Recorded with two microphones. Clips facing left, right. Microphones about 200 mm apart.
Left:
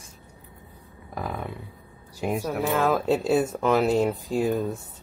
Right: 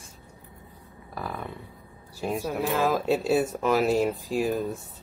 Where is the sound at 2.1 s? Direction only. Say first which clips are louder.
Left 2 dB; 15° left (ahead or behind).